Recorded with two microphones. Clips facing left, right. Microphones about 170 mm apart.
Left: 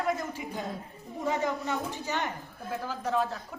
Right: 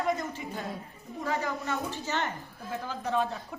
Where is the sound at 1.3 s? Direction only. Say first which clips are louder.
Left 2 dB; 20° left (ahead or behind); by 3.4 s 5° left (ahead or behind).